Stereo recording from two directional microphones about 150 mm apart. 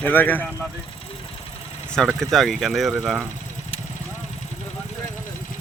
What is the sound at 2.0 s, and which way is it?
Speech, 5° left (ahead or behind).